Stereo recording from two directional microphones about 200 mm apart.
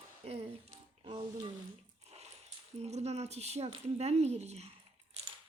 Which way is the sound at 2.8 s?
35° right (ahead or behind).